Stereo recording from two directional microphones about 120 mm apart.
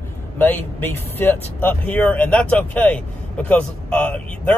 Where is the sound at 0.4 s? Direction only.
15° left (ahead or behind).